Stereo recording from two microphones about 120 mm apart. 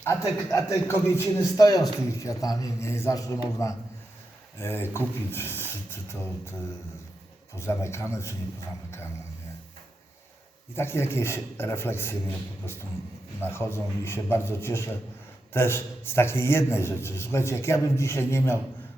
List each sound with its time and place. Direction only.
0.0 s a man's voice: 25° left (ahead or behind)
4.5 s a man's voice: 20° left (ahead or behind)
7.5 s a man's voice: 25° left (ahead or behind)
10.8 s a man's voice: 20° left (ahead or behind)
13.4 s a man's voice: 20° left (ahead or behind)